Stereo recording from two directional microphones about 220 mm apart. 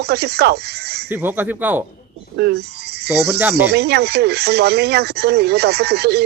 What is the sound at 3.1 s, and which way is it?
Speech, 45° right (ahead or behind).